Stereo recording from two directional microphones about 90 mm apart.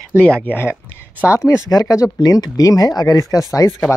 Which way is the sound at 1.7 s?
40° left (ahead or behind).